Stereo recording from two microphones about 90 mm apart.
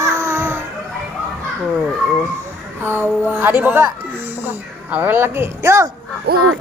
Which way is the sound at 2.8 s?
25° right (ahead or behind).